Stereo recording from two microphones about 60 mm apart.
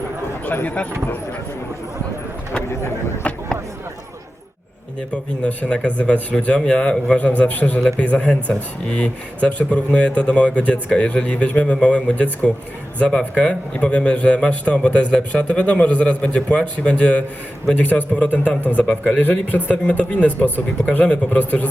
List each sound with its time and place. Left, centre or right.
0.4 s speech: left
3.2 s chop: left
5.1 s speech: left